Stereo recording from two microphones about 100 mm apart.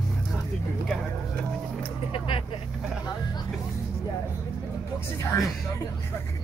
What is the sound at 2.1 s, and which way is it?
Vehicle, 65° left (ahead or behind).